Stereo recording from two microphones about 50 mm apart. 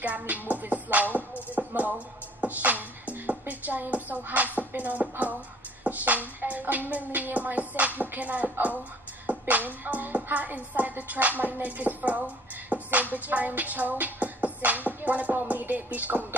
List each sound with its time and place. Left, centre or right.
0.0 s music: right
1.1 s a sound: right
4.7 s music: right
13.1 s beatboxing: right
14.9 s music: right